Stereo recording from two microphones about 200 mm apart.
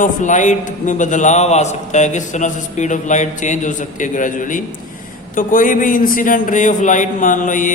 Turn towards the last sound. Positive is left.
turn(degrees=40)  # may be behind; listen again after turning